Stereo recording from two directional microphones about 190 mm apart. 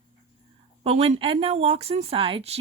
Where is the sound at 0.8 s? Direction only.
30° right (ahead or behind).